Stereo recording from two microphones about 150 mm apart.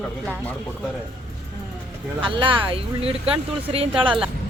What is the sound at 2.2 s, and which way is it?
Speech, 35° right (ahead or behind).